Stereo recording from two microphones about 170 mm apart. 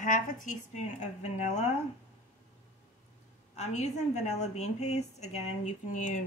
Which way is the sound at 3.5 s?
40° left (ahead or behind).